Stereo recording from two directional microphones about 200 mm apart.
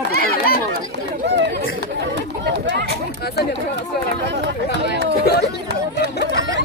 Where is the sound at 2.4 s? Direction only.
60° right (ahead or behind).